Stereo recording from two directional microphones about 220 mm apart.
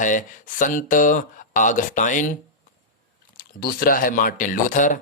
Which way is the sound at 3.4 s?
40° left (ahead or behind).